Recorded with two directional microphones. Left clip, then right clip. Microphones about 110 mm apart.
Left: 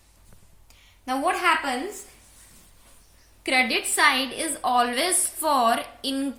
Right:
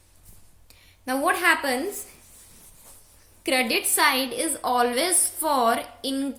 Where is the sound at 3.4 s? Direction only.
35° right (ahead or behind); by 6.3 s 20° right (ahead or behind).